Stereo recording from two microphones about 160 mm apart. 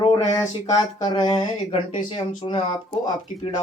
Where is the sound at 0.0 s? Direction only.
25° left (ahead or behind).